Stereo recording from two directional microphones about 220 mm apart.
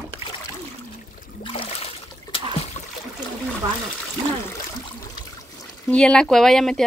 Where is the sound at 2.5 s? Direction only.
30° left (ahead or behind).